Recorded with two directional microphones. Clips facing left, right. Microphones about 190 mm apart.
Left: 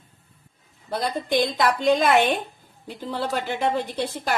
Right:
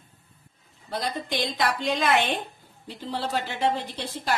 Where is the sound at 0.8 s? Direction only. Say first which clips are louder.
Left 5 dB; 45° left (ahead or behind).